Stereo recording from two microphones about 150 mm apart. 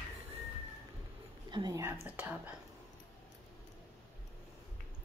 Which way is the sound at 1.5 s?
25° right (ahead or behind).